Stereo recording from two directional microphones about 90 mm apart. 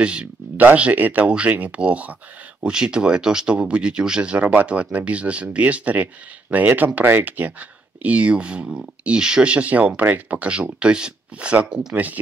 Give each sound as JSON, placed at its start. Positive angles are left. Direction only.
{"t": 0.0, "sound": "speech", "side_deg": -15}